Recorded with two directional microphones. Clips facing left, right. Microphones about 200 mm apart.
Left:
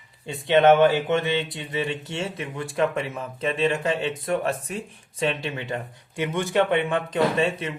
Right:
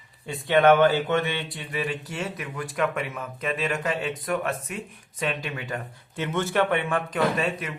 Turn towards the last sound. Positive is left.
turn(degrees=25)  # may be behind; listen again after turning